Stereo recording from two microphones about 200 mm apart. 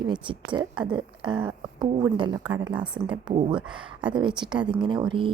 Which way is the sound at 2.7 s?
5° right (ahead or behind).